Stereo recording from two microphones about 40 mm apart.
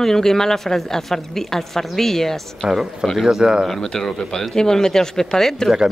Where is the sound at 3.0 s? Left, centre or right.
Centre.